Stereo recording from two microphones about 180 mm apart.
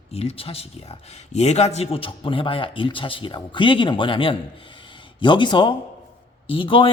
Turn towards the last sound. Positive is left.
turn(degrees=30)  # may be behind; listen again after turning